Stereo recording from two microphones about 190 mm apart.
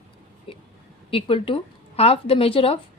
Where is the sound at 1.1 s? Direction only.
30° left (ahead or behind).